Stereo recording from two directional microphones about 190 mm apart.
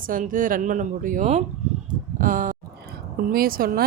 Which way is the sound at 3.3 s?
50° right (ahead or behind).